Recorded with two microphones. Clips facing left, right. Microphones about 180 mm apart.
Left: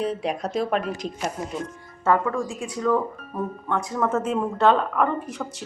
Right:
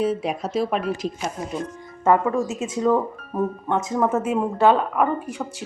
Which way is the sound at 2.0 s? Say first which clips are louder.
Right 3 dB; 20° right (ahead or behind).